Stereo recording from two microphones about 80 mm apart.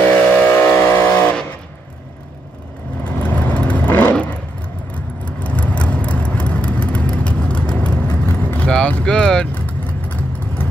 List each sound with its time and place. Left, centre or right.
0.0 s vehicle: left
3.0 s vehicle: centre
8.6 s vehicle: centre